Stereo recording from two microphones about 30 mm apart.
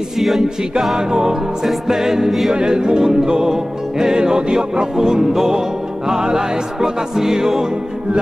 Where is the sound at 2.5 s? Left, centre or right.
Right.